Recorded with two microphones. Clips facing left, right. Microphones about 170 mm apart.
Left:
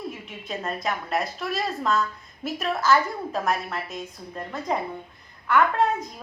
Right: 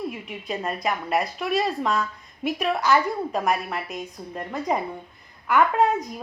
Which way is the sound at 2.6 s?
15° right (ahead or behind).